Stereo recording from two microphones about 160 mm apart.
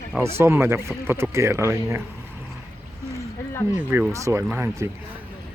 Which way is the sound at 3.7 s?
10° right (ahead or behind).